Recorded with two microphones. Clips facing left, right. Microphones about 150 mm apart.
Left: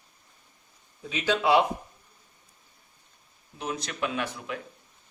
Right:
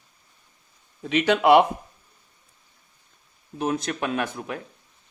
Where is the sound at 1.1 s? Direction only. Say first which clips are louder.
Right 6 dB; 65° right (ahead or behind).